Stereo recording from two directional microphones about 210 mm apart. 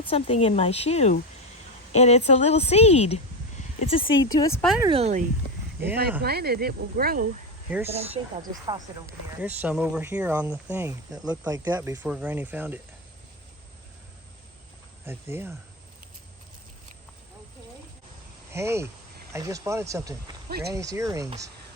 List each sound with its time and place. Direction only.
0.1 s a woman's voice: 30° left (ahead or behind)
4.8 s speech: 25° right (ahead or behind)
6.2 s speech: 50° right (ahead or behind)
7.7 s speech: 10° right (ahead or behind)
8.4 s speech: 20° right (ahead or behind)
9.4 s speech: 5° right (ahead or behind)
15.0 s speech: 10° right (ahead or behind)
18.5 s speech: 10° right (ahead or behind)
20.5 s speech: 50° right (ahead or behind)
20.7 s speech: 15° right (ahead or behind)